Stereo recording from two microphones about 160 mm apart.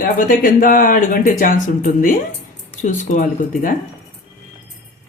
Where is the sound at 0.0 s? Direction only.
60° left (ahead or behind).